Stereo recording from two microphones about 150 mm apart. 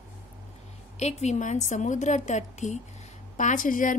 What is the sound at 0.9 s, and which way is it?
A woman's voice, 50° left (ahead or behind).